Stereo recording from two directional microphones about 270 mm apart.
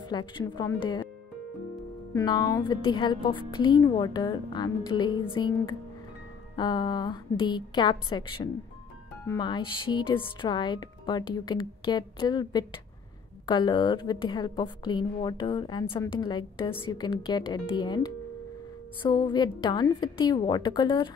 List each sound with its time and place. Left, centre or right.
0.0 s a woman's voice: centre
2.1 s a woman's voice: centre